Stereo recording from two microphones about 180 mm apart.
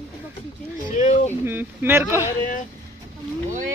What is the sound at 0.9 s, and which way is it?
Speech, 40° left (ahead or behind).